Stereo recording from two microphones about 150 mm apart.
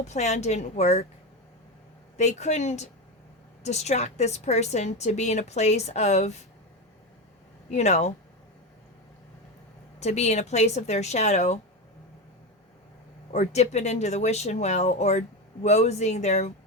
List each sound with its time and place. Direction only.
0.0 s a woman's voice: 50° left (ahead or behind)
2.1 s a woman's voice: 50° left (ahead or behind)
7.7 s a woman's voice: 50° left (ahead or behind)
10.0 s a woman's voice: 45° left (ahead or behind)
13.3 s a woman's voice: 50° left (ahead or behind)